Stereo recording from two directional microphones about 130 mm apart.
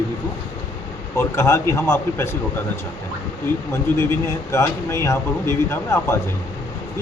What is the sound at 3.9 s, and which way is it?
Speech, 15° left (ahead or behind).